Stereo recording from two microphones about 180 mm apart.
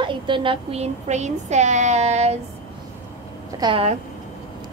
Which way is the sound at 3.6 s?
30° right (ahead or behind).